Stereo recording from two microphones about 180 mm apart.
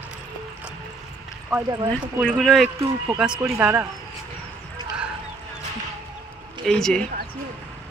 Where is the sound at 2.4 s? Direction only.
Centre (ahead or behind).